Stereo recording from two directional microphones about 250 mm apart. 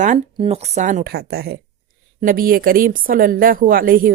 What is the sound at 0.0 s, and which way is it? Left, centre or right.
Speech, right.